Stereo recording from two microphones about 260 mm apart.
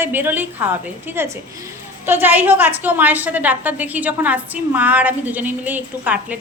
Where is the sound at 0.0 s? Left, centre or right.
Centre.